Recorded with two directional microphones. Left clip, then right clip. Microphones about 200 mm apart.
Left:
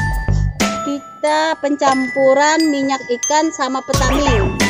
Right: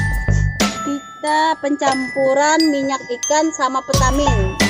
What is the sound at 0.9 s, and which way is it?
Music, 50° left (ahead or behind).